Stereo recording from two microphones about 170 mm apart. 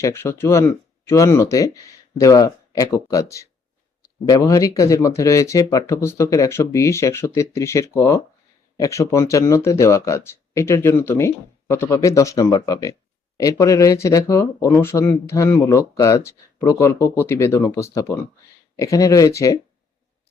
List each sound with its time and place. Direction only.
0.0 s speech: 15° left (ahead or behind)